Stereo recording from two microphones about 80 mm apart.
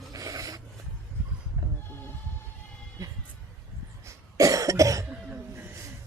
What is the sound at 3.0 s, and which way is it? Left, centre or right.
Music, right.